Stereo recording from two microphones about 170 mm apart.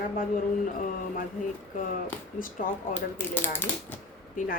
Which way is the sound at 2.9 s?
10° left (ahead or behind).